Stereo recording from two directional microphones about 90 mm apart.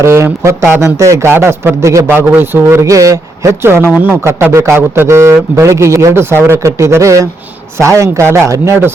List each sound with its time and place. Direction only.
0.0 s a man's voice: 30° right (ahead or behind)
2.0 s a man's voice: 25° right (ahead or behind)